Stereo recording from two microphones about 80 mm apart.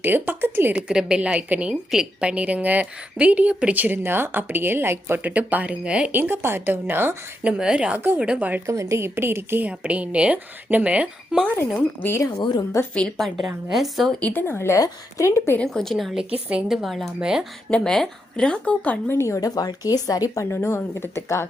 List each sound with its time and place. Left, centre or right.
0.0 s a woman's voice: right
0.7 s a woman's voice: centre
6.1 s a woman's voice: right
7.4 s a woman's voice: centre
8.6 s a woman's voice: right
9.6 s a woman's voice: centre
13.1 s a woman's voice: centre
14.2 s a woman's voice: left
15.6 s a woman's voice: centre
17.7 s a woman's voice: centre
19.1 s a woman's voice: left
19.4 s speech: left
20.6 s speech: left